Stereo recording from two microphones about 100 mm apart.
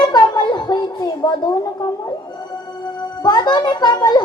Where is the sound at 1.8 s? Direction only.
45° left (ahead or behind).